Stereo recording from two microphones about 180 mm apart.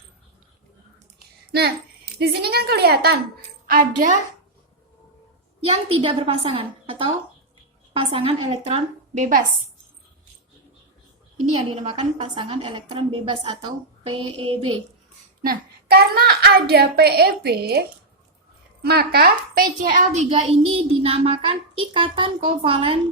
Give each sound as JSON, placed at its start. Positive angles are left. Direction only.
{"t": 2.1, "sound": "a child's voice", "side_deg": -60}
{"t": 3.7, "sound": "a woman's voice", "side_deg": -50}
{"t": 5.6, "sound": "a woman's voice", "side_deg": -30}
{"t": 11.4, "sound": "a woman's voice", "side_deg": -40}
{"t": 15.4, "sound": "a child's voice", "side_deg": -60}